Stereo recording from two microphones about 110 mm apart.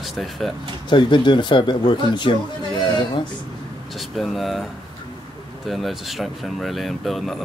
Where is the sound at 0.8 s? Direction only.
45° left (ahead or behind).